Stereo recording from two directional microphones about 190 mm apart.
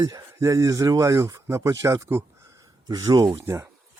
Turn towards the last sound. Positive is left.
turn(degrees=-15)  # may be behind; listen again after turning